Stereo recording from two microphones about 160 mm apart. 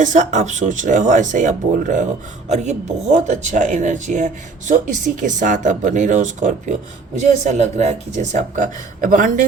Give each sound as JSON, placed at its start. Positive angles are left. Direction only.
{"t": 0.0, "sound": "speech", "side_deg": -50}